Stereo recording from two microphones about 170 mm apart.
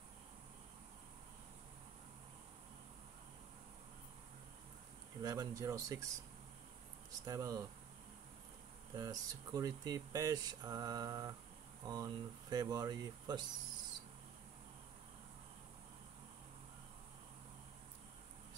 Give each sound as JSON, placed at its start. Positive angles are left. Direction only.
{"t": 5.2, "sound": "speech", "side_deg": -20}
{"t": 7.2, "sound": "speech", "side_deg": -20}
{"t": 8.9, "sound": "speech", "side_deg": -20}